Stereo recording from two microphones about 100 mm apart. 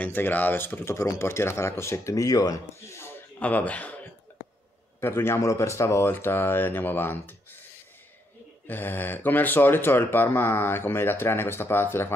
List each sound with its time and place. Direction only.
0.0 s speech: 20° left (ahead or behind)
3.3 s speech: 15° left (ahead or behind)
5.0 s speech: 25° left (ahead or behind)
8.6 s speech: 20° left (ahead or behind)